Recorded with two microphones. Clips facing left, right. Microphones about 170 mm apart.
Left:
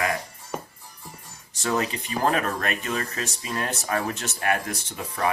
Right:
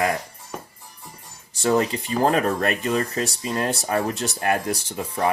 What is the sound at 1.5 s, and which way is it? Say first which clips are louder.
Speech: right 6 dB; 30° right (ahead or behind).